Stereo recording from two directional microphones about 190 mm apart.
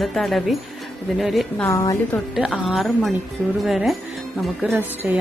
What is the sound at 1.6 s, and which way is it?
Speech, 15° left (ahead or behind).